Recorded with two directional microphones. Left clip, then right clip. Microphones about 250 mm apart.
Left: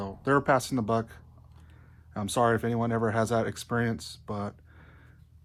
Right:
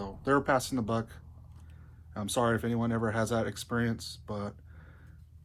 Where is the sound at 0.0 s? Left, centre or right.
Left.